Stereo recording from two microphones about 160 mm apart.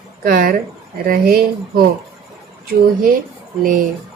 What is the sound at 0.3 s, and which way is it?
Speech, 65° right (ahead or behind).